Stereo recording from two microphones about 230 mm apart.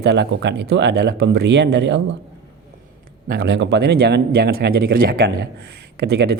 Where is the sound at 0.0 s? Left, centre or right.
Right.